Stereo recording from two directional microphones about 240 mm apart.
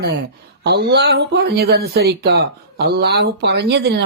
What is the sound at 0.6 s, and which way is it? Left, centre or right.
Speech, right.